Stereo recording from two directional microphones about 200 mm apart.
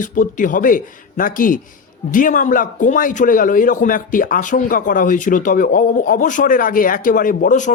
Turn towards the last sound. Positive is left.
turn(degrees=40)  # may be behind; listen again after turning